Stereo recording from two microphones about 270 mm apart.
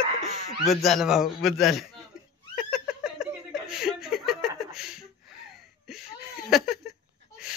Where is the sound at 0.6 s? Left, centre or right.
Centre.